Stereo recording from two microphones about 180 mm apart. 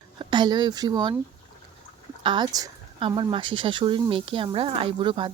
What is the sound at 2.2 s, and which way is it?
A woman's voice, 25° right (ahead or behind).